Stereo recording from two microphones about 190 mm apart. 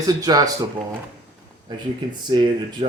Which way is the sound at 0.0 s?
20° right (ahead or behind).